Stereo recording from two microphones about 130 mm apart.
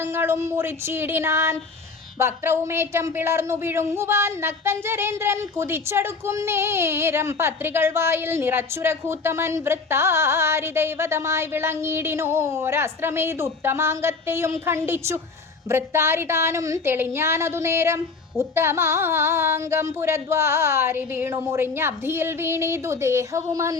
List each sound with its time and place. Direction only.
0.0 s speech: 20° right (ahead or behind)